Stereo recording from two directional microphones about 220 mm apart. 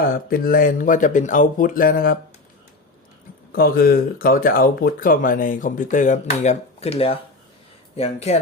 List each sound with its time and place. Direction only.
0.0 s speech: 40° left (ahead or behind)
3.5 s speech: 40° left (ahead or behind)